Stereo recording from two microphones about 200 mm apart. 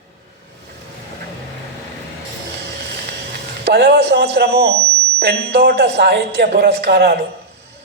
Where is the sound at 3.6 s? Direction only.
55° right (ahead or behind).